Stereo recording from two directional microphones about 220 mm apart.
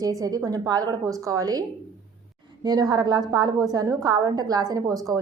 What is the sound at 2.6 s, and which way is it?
A woman's voice, 20° right (ahead or behind).